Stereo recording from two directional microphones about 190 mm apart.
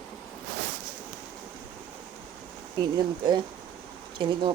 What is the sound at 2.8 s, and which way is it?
Speech, 25° right (ahead or behind).